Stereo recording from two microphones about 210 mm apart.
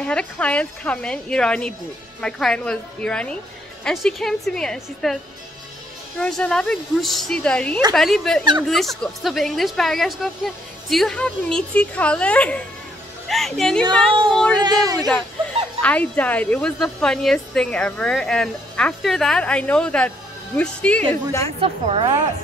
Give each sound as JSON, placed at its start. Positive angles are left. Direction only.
{"t": 0.0, "sound": "a woman's voice", "side_deg": 5}
{"t": 14.6, "sound": "a man's voice", "side_deg": -20}
{"t": 15.8, "sound": "a woman's voice", "side_deg": 5}
{"t": 21.5, "sound": "a woman's voice", "side_deg": -25}